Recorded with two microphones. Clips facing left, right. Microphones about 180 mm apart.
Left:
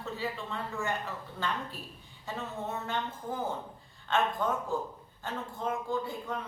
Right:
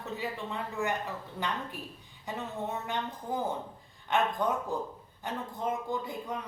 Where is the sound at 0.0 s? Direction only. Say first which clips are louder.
Even; 15° right (ahead or behind).